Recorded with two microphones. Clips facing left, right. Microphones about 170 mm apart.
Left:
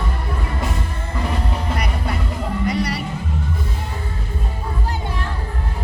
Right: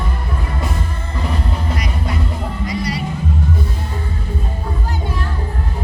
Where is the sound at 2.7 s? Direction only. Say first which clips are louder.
Right 1 dB; 65° left (ahead or behind).